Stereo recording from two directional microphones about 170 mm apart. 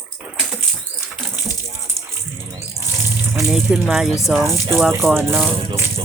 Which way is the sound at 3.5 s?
Centre (ahead or behind).